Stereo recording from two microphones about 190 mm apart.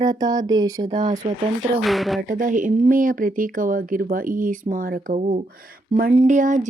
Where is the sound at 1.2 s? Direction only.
35° right (ahead or behind).